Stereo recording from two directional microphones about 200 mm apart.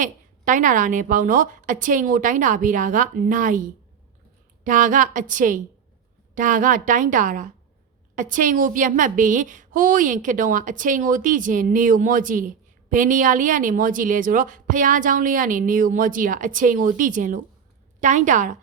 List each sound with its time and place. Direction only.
0.0 s a woman's voice: 40° right (ahead or behind)